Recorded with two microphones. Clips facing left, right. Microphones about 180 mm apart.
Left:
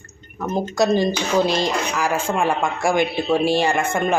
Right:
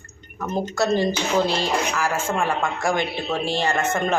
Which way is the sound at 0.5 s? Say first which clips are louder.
Left 3 dB; 15° left (ahead or behind).